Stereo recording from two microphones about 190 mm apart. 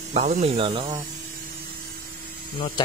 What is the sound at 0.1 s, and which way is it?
Speech, 35° right (ahead or behind).